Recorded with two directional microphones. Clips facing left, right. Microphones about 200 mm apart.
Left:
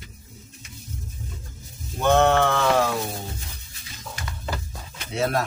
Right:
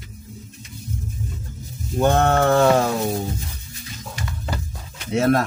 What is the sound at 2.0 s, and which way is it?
Speech, 45° right (ahead or behind).